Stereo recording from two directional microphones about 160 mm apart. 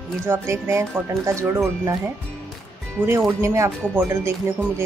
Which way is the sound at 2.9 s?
15° right (ahead or behind).